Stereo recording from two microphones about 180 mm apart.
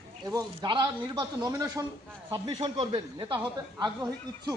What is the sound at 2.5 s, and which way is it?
Speech, 30° right (ahead or behind).